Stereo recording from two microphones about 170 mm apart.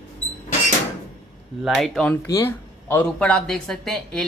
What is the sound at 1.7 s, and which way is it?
Speech, 5° left (ahead or behind).